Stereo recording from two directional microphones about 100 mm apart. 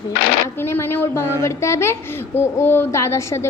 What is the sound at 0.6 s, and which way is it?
A woman's voice, 25° left (ahead or behind).